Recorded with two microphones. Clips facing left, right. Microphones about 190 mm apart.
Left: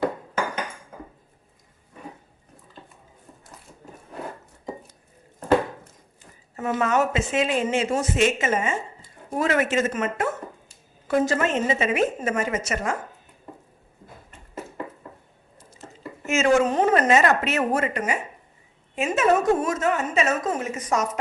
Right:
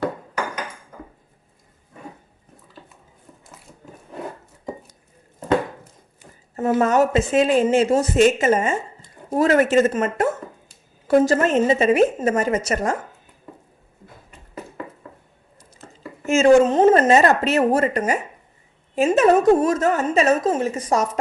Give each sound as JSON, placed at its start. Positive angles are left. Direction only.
{"t": 6.7, "sound": "a woman's voice", "side_deg": -40}
{"t": 16.2, "sound": "a sound", "side_deg": -30}
{"t": 16.9, "sound": "a woman's voice", "side_deg": -35}